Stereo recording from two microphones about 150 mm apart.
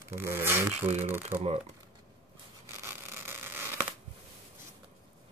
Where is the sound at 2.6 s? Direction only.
15° right (ahead or behind).